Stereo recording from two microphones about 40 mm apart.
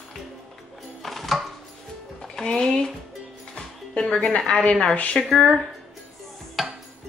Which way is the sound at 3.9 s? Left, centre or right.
Centre.